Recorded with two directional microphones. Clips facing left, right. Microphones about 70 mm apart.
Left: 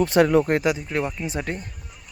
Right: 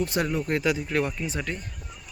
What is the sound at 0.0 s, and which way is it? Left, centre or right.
Speech, left.